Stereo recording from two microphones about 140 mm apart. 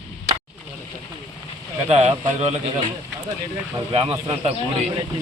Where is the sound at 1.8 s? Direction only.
50° right (ahead or behind).